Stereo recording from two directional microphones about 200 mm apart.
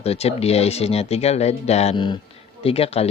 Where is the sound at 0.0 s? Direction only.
30° left (ahead or behind).